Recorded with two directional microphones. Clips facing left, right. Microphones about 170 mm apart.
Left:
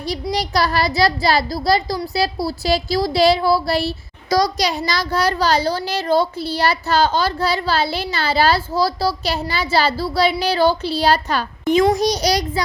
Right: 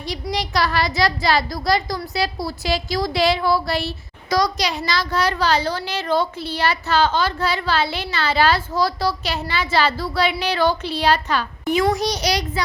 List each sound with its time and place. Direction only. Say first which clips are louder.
0.0 s a child's voice: left 3 dB; 35° left (ahead or behind)